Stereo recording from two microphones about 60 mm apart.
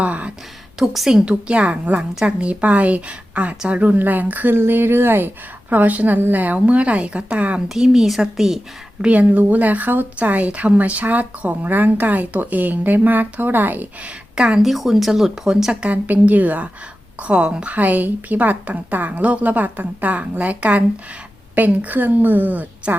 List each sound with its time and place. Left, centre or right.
0.0 s a woman's voice: right
0.8 s speech: centre
1.2 s a woman's voice: centre
4.5 s speech: right
5.7 s a woman's voice: right
7.7 s a woman's voice: centre
9.0 s a woman's voice: right
14.3 s a woman's voice: centre
14.6 s speech: centre
15.7 s a woman's voice: right